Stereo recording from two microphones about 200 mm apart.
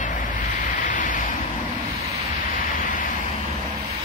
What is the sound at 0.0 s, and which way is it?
Vehicle, 40° left (ahead or behind).